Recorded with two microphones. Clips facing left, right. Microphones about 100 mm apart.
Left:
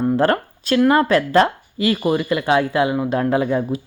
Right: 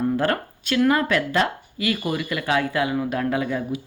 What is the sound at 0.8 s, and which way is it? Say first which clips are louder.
Speech: left 4 dB; 30° left (ahead or behind).